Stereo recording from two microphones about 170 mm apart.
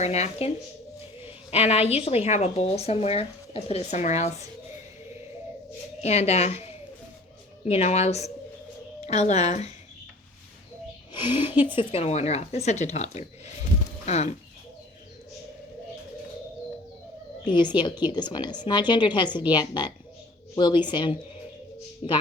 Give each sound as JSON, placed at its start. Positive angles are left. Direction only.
{"t": 0.0, "sound": "a woman's voice", "side_deg": 40}
{"t": 6.0, "sound": "a woman's voice", "side_deg": 40}
{"t": 11.1, "sound": "a woman's voice", "side_deg": 25}
{"t": 17.4, "sound": "a woman's voice", "side_deg": 25}